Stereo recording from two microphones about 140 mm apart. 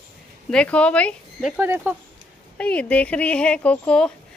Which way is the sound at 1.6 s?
15° right (ahead or behind).